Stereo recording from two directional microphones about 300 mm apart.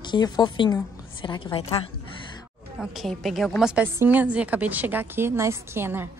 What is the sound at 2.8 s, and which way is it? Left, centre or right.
A woman's voice, centre.